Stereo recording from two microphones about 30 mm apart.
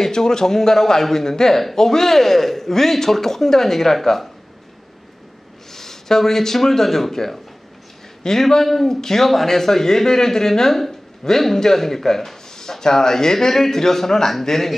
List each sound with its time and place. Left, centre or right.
0.0 s speech: centre
5.7 s speech: centre
8.4 s speech: centre